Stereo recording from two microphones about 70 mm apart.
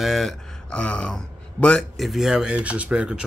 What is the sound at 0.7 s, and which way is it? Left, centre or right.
Speech, centre.